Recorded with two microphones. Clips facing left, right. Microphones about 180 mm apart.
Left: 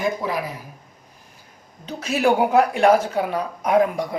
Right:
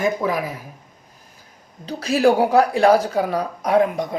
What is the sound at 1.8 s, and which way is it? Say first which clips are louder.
A woman's voice: right 3 dB; 35° right (ahead or behind).